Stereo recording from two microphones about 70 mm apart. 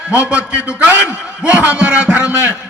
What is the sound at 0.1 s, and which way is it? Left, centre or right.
A man's voice, centre.